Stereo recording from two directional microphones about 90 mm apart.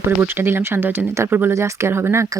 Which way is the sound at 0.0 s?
25° right (ahead or behind).